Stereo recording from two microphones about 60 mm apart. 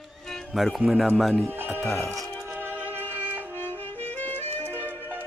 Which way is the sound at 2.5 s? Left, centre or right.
Right.